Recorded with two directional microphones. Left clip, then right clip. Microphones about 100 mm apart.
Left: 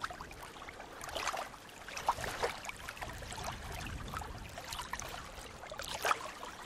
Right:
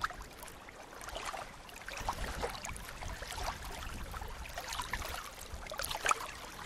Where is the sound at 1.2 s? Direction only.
35° left (ahead or behind).